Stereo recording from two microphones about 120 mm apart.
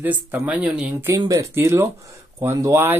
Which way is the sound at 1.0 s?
25° right (ahead or behind).